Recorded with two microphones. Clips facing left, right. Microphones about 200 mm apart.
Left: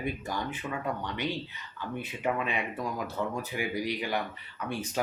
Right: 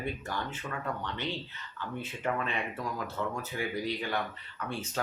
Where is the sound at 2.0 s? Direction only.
15° left (ahead or behind).